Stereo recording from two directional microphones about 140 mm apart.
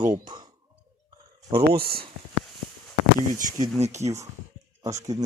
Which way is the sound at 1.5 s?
45° right (ahead or behind).